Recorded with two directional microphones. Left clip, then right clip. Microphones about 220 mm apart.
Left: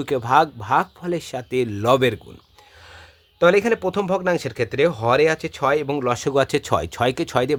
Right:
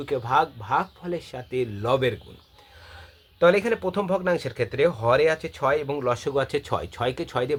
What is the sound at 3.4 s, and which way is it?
Speech, 40° left (ahead or behind).